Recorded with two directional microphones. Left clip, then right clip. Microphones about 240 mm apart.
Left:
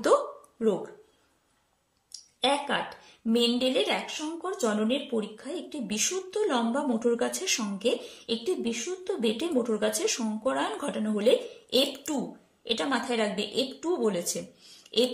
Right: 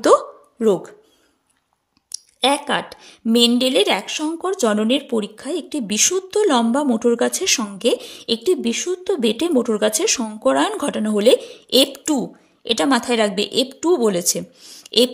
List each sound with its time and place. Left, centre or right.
0.0 s hiccup: right
2.1 s speech: right